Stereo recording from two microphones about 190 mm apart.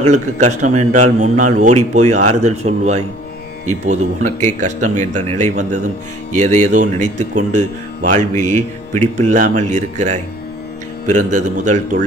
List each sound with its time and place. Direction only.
0.0 s speech: 40° right (ahead or behind)